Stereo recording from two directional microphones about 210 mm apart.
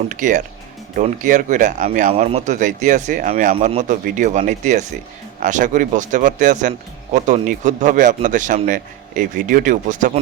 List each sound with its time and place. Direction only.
0.1 s speech: 35° right (ahead or behind)